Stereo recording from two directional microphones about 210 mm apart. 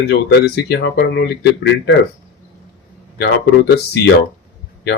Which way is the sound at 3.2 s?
50° left (ahead or behind).